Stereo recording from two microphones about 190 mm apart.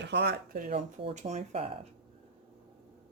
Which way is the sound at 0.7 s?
35° right (ahead or behind).